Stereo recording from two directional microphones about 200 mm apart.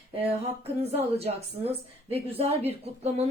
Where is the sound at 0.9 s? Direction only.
30° right (ahead or behind).